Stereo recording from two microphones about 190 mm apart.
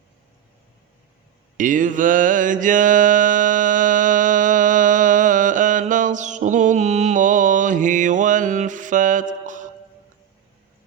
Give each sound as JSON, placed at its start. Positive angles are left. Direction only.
{"t": 1.5, "sound": "mantra", "side_deg": -45}